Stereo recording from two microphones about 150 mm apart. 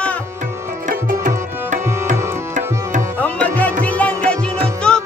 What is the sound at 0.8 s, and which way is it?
Tabla, 60° right (ahead or behind).